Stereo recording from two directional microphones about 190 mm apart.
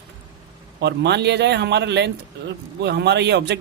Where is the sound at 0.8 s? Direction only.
65° right (ahead or behind).